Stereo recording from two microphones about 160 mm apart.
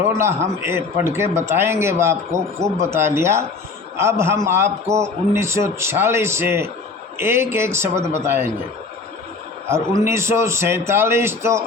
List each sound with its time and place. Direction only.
0.0 s a man's voice: 15° right (ahead or behind)
9.6 s a man's voice: 15° right (ahead or behind)